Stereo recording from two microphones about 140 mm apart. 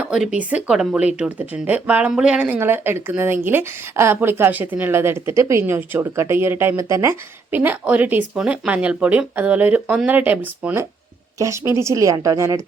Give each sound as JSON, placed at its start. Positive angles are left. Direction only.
{"t": 0.0, "sound": "a woman's voice", "side_deg": -5}
{"t": 11.3, "sound": "a woman's voice", "side_deg": -20}